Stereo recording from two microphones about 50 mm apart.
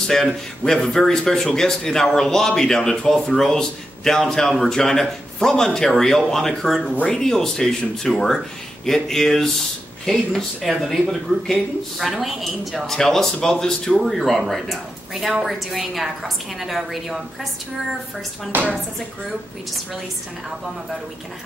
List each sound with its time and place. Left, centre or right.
0.7 s speech: centre
18.5 s speech: right